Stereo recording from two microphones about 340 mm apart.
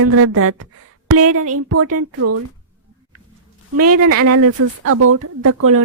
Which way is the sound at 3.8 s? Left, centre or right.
Right.